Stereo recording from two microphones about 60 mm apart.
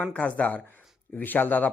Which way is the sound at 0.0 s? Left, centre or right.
Left.